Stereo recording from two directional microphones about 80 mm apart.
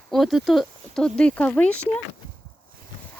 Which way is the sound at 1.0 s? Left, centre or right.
Centre.